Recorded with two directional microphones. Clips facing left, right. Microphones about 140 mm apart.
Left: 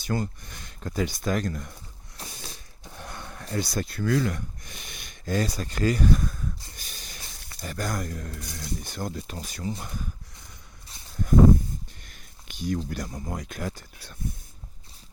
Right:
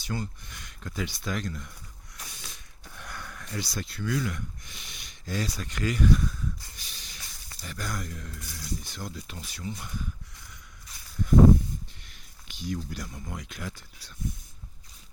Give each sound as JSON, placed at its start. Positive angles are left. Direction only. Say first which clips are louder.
{"t": 0.0, "sound": "speech", "louder": "left 5 dB", "side_deg": 50}
{"t": 2.1, "sound": "a sound", "louder": "left 5 dB", "side_deg": 35}
{"t": 3.6, "sound": "speech", "louder": "left 6 dB", "side_deg": 50}
{"t": 10.5, "sound": "walk", "louder": "left 1 dB", "side_deg": 30}
{"t": 12.0, "sound": "a sound", "louder": "left 3 dB", "side_deg": 50}
{"t": 12.9, "sound": "speech", "louder": "left 5 dB", "side_deg": 45}